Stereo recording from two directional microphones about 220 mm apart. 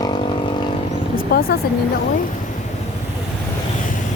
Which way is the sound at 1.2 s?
45° left (ahead or behind).